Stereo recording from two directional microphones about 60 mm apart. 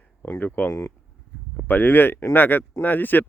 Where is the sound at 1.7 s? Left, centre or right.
Left.